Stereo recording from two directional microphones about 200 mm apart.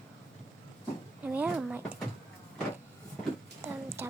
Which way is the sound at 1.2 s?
10° right (ahead or behind).